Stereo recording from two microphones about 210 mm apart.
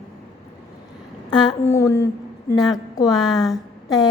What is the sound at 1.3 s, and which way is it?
A woman's voice, 15° left (ahead or behind).